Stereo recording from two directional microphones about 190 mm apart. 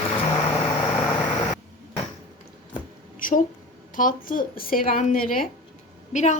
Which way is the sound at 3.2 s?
45° left (ahead or behind).